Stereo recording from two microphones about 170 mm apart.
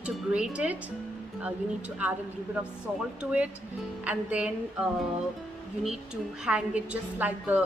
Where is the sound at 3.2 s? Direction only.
5° right (ahead or behind).